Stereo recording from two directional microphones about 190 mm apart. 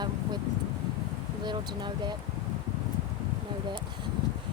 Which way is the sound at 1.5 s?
25° right (ahead or behind).